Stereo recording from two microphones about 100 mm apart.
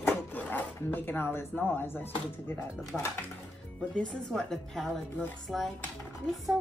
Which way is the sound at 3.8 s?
10° left (ahead or behind).